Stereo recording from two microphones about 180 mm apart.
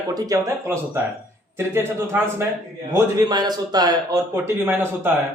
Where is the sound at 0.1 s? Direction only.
20° right (ahead or behind).